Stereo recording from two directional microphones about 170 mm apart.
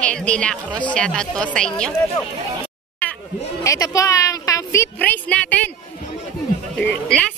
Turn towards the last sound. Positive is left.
turn(degrees=5)  # may be behind; listen again after turning